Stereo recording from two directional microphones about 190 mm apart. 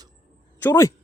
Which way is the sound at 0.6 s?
15° left (ahead or behind).